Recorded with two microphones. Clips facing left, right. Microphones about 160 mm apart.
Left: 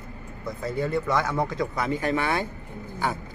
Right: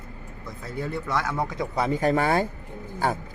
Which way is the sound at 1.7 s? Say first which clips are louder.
Right 3 dB; 35° right (ahead or behind).